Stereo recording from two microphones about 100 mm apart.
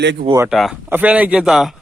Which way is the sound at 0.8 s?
15° right (ahead or behind).